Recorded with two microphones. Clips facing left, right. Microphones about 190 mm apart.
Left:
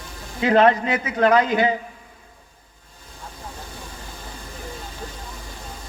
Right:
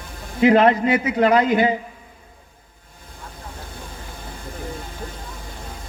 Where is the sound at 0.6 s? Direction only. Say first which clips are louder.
Right 2 dB; 15° right (ahead or behind).